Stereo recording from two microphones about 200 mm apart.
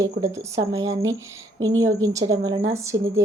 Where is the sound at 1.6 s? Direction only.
90° right.